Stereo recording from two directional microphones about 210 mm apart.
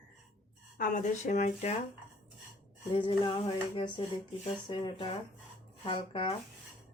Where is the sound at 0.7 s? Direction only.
40° left (ahead or behind).